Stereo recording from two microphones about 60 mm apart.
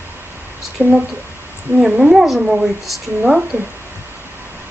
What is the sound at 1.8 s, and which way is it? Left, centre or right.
Speech, centre.